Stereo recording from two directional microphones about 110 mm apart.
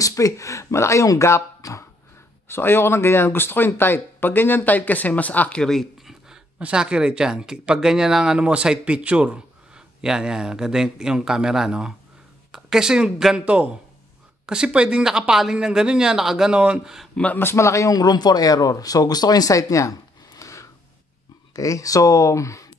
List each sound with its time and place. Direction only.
0.0 s speech: 30° left (ahead or behind); by 17.1 s 5° right (ahead or behind)
17.1 s a man's voice: 10° left (ahead or behind); by 22.7 s 30° left (ahead or behind)